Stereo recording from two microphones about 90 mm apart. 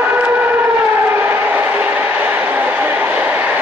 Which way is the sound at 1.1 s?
20° right (ahead or behind).